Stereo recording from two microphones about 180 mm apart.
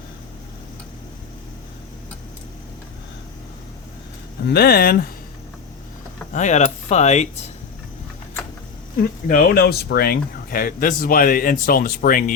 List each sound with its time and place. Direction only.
4.4 s speech: 60° left (ahead or behind)
6.3 s speech: 40° left (ahead or behind)
9.0 s speech: 55° left (ahead or behind)